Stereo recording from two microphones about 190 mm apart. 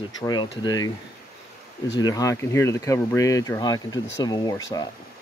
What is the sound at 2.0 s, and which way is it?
Speech, 20° left (ahead or behind).